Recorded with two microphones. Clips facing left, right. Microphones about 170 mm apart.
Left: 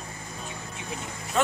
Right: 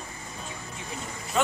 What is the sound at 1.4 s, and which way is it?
Speech, centre (ahead or behind).